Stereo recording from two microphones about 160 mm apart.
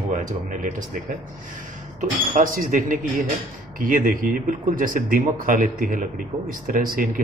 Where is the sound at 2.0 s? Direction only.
55° right (ahead or behind).